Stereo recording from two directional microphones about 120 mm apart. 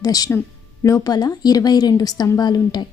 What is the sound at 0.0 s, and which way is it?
A woman's voice, 30° left (ahead or behind).